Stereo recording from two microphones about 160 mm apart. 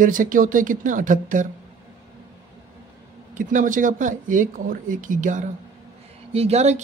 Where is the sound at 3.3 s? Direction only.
55° right (ahead or behind).